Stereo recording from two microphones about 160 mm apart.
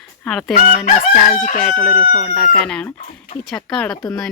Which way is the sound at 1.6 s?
5° left (ahead or behind).